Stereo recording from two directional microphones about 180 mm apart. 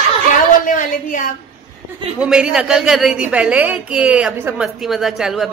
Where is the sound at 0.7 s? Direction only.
45° left (ahead or behind).